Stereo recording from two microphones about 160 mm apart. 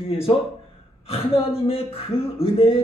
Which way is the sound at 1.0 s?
35° left (ahead or behind).